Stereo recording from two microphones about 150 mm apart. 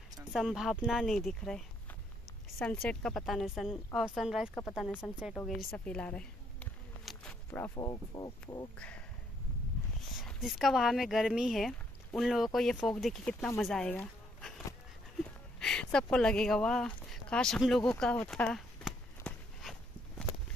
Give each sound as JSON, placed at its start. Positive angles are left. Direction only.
{"t": 0.2, "sound": "a woman's voice", "side_deg": 0}
{"t": 2.6, "sound": "a woman's voice", "side_deg": 5}
{"t": 5.5, "sound": "a sound", "side_deg": 5}
{"t": 7.8, "sound": "speech", "side_deg": 25}
{"t": 8.7, "sound": "speech", "side_deg": 10}
{"t": 10.1, "sound": "a woman's voice", "side_deg": 0}
{"t": 15.6, "sound": "speech", "side_deg": 5}
{"t": 17.9, "sound": "walk", "side_deg": 5}